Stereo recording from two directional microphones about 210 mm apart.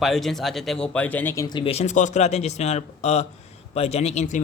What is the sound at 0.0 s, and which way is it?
Speech, centre (ahead or behind).